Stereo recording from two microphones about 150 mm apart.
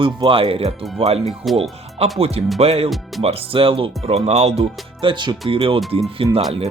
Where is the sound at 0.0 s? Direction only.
35° right (ahead or behind).